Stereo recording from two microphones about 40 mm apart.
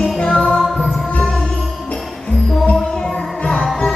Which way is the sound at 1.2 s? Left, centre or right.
Left.